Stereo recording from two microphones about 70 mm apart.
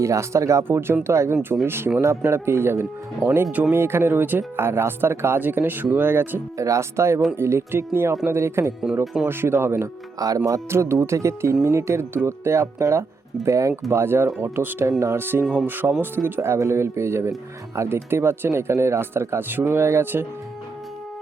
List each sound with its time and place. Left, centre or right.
0.0 s speech: right
0.7 s speech: right
3.5 s speech: right
3.8 s speech: right
6.6 s speech: right
10.2 s speech: right
10.7 s speech: right
13.9 s speech: right
14.8 s speech: right
15.2 s speech: right